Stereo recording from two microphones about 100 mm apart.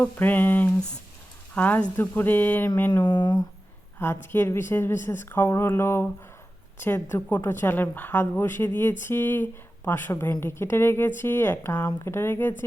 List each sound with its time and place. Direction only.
0.0 s a woman's voice: 20° left (ahead or behind)
3.1 s speech: 45° left (ahead or behind)
3.9 s a woman's voice: 20° left (ahead or behind)